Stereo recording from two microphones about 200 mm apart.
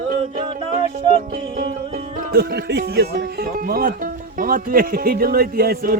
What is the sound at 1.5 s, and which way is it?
Speech, 45° right (ahead or behind).